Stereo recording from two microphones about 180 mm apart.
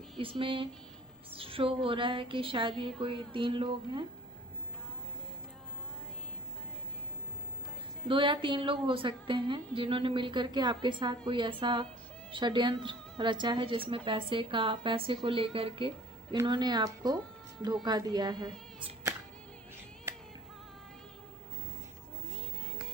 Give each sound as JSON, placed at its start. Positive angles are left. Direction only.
{"t": 0.2, "sound": "a woman's voice", "side_deg": -30}
{"t": 8.0, "sound": "a woman's voice", "side_deg": -30}